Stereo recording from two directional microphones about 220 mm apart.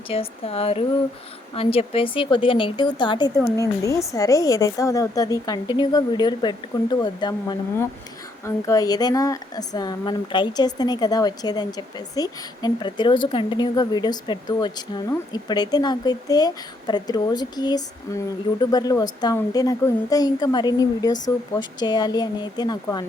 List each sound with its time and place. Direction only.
0.1 s speech: 25° left (ahead or behind)